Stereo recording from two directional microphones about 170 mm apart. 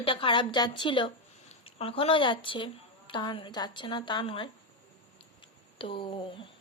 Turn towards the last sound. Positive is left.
turn(degrees=30)  # may be behind; listen again after turning